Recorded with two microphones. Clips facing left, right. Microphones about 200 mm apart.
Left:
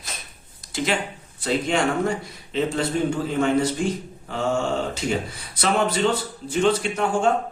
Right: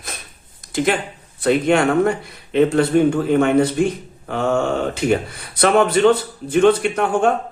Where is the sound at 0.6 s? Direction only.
55° right (ahead or behind).